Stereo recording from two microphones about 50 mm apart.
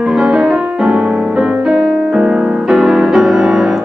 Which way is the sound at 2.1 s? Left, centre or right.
Right.